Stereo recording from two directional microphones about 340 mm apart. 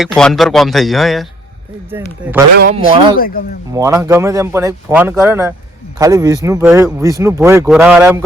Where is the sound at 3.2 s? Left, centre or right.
Left.